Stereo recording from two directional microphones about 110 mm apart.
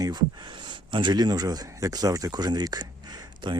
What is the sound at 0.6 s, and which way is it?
Speech, 45° right (ahead or behind).